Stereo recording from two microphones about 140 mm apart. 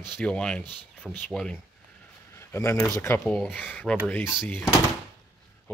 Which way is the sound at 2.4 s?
20° left (ahead or behind).